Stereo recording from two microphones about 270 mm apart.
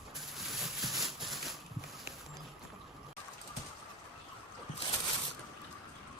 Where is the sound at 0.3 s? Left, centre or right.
Centre.